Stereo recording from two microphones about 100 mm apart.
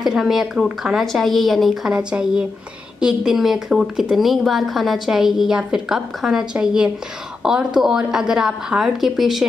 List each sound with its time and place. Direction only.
0.0 s a woman's voice: centre (ahead or behind)
1.0 s a woman's voice: centre (ahead or behind)